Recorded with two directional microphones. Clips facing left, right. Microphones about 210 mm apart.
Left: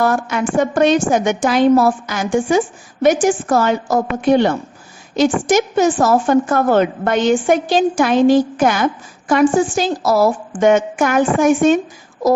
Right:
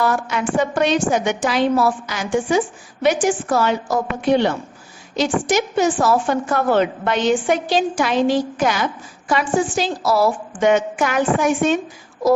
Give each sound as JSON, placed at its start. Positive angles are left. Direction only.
{"t": 0.0, "sound": "a woman's voice", "side_deg": 50}